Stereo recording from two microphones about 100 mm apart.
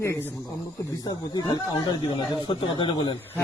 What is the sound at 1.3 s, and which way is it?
Speech, 45° left (ahead or behind).